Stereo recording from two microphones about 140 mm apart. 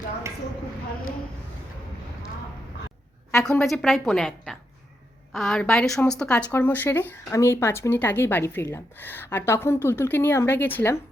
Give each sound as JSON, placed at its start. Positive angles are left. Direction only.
{"t": 3.4, "sound": "a woman's voice", "side_deg": 5}